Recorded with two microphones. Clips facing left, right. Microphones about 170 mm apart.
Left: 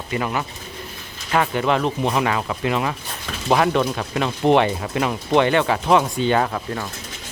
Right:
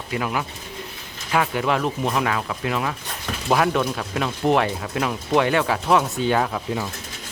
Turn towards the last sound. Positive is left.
turn(degrees=-5)  # may be behind; listen again after turning